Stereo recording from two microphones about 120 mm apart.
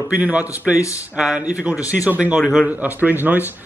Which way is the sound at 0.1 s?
10° right (ahead or behind).